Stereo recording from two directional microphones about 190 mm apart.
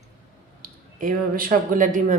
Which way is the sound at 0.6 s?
45° right (ahead or behind).